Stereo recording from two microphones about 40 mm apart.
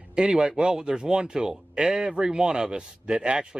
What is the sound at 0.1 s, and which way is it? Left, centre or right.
Speech, centre.